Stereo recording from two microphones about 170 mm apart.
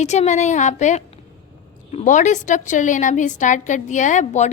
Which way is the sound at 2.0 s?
45° left (ahead or behind).